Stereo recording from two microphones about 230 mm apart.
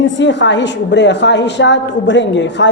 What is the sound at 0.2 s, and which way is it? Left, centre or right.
A woman's voice, left.